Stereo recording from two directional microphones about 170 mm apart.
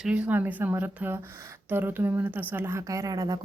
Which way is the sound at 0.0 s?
5° right (ahead or behind).